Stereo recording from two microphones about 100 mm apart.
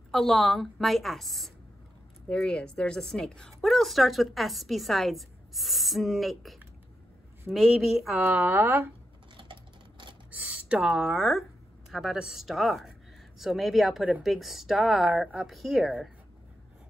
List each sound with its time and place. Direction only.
0.1 s a woman's voice: centre (ahead or behind)
8.3 s a woman's voice: 20° right (ahead or behind)
9.4 s a sound: 55° right (ahead or behind)
10.3 s a woman's voice: 15° right (ahead or behind)